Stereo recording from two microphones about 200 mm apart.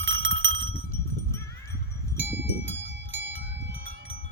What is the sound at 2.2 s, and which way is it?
Goat, 65° right (ahead or behind).